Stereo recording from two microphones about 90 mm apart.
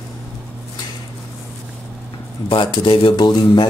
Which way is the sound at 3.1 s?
55° left (ahead or behind).